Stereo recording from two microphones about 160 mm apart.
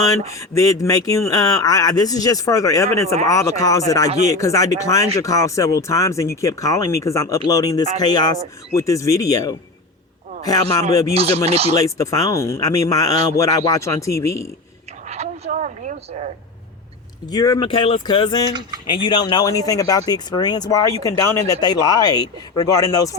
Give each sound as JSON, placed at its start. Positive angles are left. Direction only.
{"t": 0.3, "sound": "speech", "side_deg": 20}
{"t": 11.1, "sound": "speech", "side_deg": -40}
{"t": 11.8, "sound": "speech", "side_deg": 20}
{"t": 15.0, "sound": "a woman's voice", "side_deg": -45}
{"t": 17.2, "sound": "speech", "side_deg": 20}
{"t": 17.7, "sound": "speech", "side_deg": 35}